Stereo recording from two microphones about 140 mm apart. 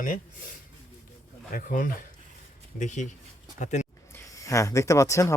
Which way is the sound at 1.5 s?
70° left (ahead or behind).